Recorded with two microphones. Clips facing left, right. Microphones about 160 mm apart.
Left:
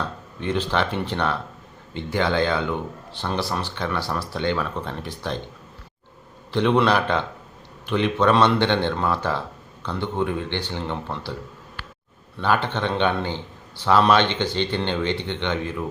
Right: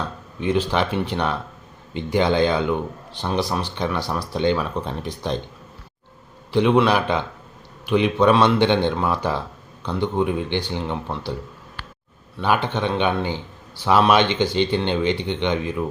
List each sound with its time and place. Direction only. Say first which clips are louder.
0.3 s speech: right 3 dB; 10° right (ahead or behind)
6.5 s speech: right 2 dB; 10° right (ahead or behind)
12.4 s speech: right 1 dB; 15° right (ahead or behind)